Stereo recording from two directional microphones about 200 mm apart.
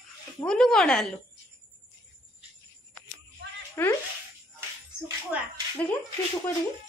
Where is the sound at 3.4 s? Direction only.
60° right (ahead or behind).